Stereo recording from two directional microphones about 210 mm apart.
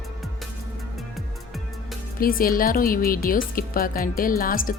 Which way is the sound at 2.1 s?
45° left (ahead or behind).